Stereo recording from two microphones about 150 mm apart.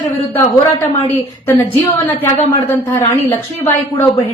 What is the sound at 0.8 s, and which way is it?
Speech, 15° left (ahead or behind).